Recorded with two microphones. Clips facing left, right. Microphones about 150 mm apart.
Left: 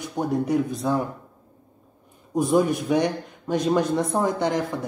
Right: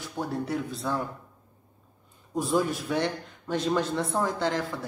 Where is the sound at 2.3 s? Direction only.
15° left (ahead or behind).